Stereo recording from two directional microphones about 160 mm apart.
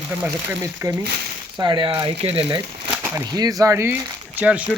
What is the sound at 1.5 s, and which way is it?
Speech, 30° right (ahead or behind).